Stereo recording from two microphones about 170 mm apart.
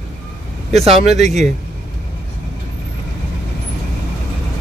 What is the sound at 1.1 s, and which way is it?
Speech, 40° right (ahead or behind).